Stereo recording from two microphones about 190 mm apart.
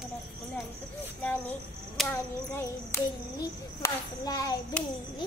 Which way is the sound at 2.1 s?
10° left (ahead or behind).